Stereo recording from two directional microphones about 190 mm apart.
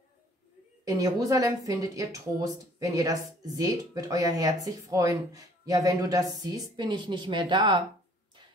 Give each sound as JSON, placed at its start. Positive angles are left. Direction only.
{"t": 0.8, "sound": "speech", "side_deg": -15}